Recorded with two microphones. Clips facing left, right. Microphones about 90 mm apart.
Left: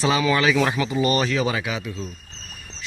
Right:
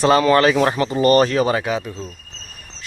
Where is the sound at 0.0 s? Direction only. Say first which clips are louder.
Right 6 dB; 50° right (ahead or behind).